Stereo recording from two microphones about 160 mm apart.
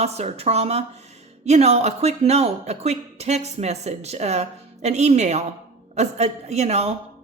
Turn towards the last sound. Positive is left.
turn(degrees=-40)  # may be behind; listen again after turning